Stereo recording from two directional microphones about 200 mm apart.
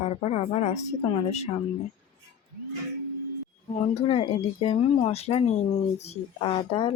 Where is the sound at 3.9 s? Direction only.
30° left (ahead or behind).